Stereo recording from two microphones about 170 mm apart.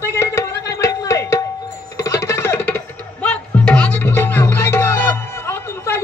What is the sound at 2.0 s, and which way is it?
Music, 20° left (ahead or behind).